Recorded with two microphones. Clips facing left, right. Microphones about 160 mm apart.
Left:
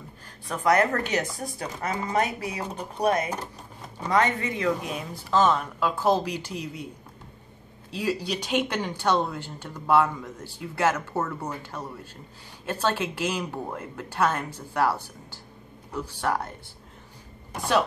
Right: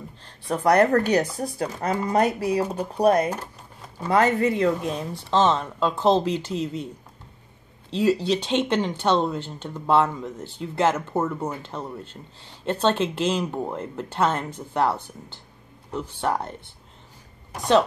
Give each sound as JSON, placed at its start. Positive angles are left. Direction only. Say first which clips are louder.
{"t": 0.5, "sound": "speech", "louder": "right 4 dB", "side_deg": -35}
{"t": 7.9, "sound": "speech", "louder": "right 7 dB", "side_deg": -25}